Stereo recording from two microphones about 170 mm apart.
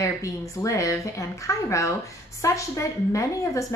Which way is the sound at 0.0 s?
20° left (ahead or behind).